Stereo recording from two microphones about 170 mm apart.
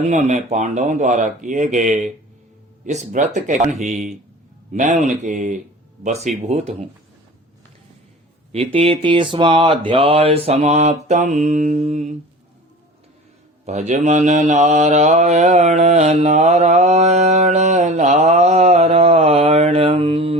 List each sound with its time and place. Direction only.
0.0 s speech: 45° right (ahead or behind)
6.2 s mantra: 40° right (ahead or behind)
8.5 s mantra: 35° right (ahead or behind)
11.1 s speech: 45° right (ahead or behind)
13.7 s mantra: 45° right (ahead or behind)